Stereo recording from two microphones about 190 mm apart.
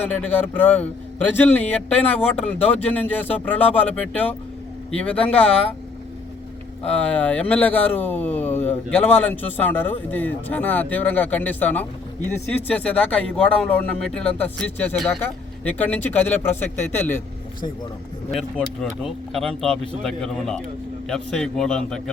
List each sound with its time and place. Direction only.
0.1 s speech: 10° left (ahead or behind)
6.8 s speech: 5° left (ahead or behind)
18.3 s speech: 5° left (ahead or behind)